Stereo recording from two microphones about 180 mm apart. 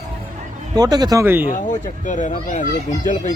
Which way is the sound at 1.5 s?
45° left (ahead or behind).